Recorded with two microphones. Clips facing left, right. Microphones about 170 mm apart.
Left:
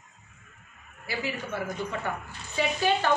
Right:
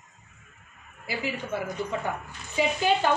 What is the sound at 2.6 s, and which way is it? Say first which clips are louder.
Speech: right 3 dB; 15° right (ahead or behind).